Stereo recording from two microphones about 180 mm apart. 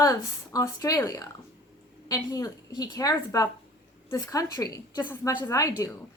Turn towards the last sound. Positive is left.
turn(degrees=15)  # may be behind; listen again after turning